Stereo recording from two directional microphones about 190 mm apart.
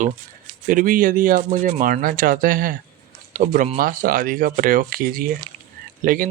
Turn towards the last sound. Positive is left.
turn(degrees=-45)  # may be behind; listen again after turning